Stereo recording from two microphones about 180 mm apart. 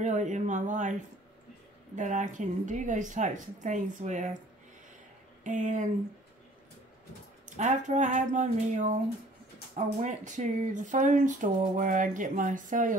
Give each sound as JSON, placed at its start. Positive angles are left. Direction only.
{"t": 0.0, "sound": "speech", "side_deg": -45}
{"t": 2.0, "sound": "speech", "side_deg": -45}
{"t": 5.4, "sound": "speech", "side_deg": -45}
{"t": 7.4, "sound": "speech", "side_deg": -40}